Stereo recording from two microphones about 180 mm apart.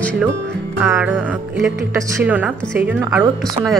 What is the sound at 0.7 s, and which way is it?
Speech, 10° right (ahead or behind).